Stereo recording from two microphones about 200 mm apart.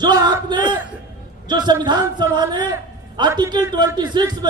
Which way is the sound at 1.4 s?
20° right (ahead or behind).